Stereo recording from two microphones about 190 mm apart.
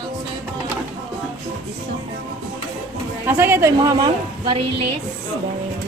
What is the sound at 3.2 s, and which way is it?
A woman's voice, 10° right (ahead or behind).